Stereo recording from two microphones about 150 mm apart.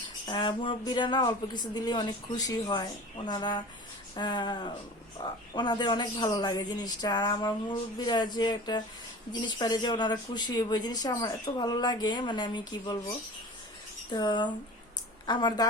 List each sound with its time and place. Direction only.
0.3 s a man's voice: 30° left (ahead or behind)
14.1 s a man's voice: 30° left (ahead or behind)